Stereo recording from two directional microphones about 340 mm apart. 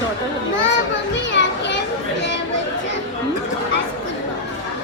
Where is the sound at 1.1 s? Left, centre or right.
Left.